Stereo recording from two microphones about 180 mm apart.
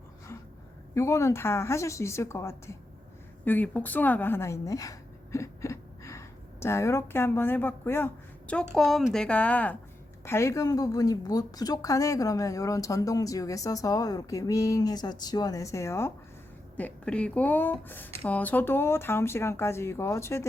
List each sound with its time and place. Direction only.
0.9 s a woman's voice: 15° left (ahead or behind)